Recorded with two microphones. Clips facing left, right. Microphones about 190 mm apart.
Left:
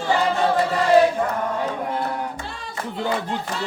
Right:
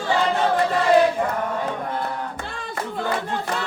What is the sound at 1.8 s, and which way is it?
Music, 10° left (ahead or behind).